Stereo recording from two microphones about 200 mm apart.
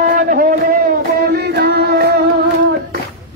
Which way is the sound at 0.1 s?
40° right (ahead or behind).